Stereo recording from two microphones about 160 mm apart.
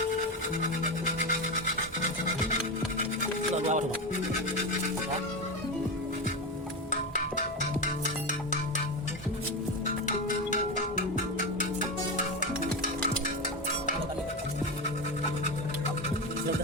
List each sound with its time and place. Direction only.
3.5 s music: 50° right (ahead or behind)
6.9 s music: 50° left (ahead or behind)
10.1 s music: 50° left (ahead or behind)